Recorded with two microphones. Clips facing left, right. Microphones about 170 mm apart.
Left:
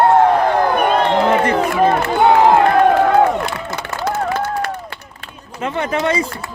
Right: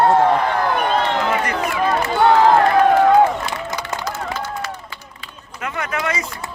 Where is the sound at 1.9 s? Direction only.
55° left (ahead or behind).